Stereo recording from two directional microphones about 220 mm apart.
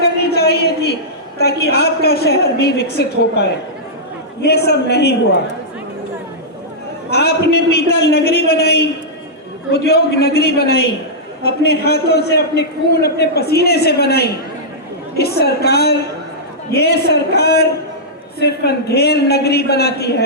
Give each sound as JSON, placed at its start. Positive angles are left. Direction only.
{"t": 0.0, "sound": "a sound", "side_deg": 45}
{"t": 1.4, "sound": "a man's voice", "side_deg": 45}
{"t": 7.1, "sound": "a man's voice", "side_deg": 50}